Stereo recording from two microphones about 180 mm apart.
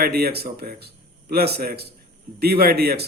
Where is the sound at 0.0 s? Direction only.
60° right (ahead or behind).